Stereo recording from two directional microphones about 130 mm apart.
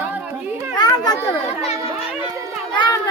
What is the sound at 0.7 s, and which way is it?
Speech, 30° left (ahead or behind).